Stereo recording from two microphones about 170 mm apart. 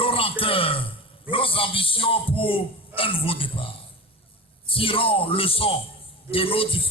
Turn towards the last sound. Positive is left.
turn(degrees=30)  # may be behind; listen again after turning